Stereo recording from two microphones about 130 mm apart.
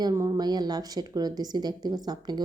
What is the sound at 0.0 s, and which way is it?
Speech, 30° right (ahead or behind).